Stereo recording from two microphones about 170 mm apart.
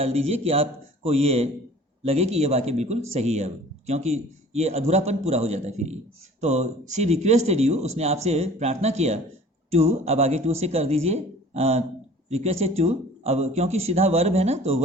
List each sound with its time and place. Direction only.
0.0 s speech: 35° right (ahead or behind)